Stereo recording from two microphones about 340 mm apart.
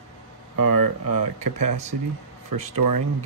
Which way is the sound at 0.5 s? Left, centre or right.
Right.